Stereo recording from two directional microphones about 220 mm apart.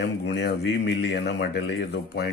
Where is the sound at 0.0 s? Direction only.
50° left (ahead or behind).